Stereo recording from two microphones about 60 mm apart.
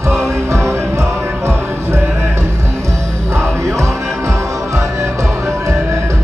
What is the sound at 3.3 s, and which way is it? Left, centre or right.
Music, right.